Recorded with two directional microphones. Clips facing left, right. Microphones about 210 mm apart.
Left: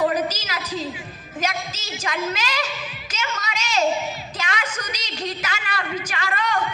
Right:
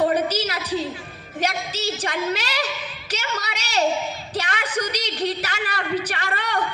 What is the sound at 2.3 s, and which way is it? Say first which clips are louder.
A man's voice: right 1 dB; 35° right (ahead or behind).